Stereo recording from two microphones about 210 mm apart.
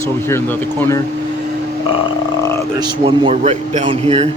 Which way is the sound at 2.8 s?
20° right (ahead or behind).